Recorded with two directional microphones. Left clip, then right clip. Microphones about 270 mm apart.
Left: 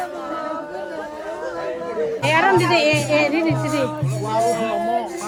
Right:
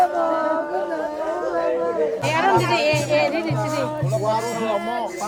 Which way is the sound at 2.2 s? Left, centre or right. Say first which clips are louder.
Left 4 dB; left.